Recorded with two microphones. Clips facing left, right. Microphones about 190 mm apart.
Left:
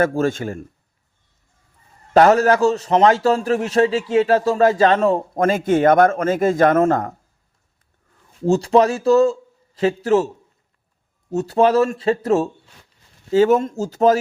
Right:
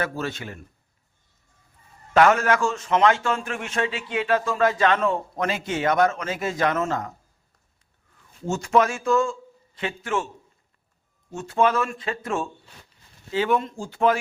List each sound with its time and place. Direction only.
0.0 s a man's voice: 45° left (ahead or behind)
2.1 s a man's voice: 35° left (ahead or behind); by 7.2 s 55° left (ahead or behind)
8.4 s a man's voice: 35° left (ahead or behind)
11.3 s a man's voice: 40° left (ahead or behind)